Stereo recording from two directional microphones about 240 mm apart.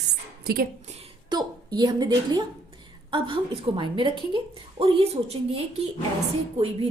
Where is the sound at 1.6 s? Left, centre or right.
Centre.